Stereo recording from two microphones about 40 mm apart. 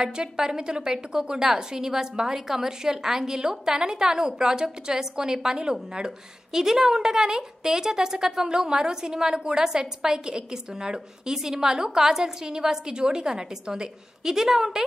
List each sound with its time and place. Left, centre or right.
0.0 s a woman's voice: centre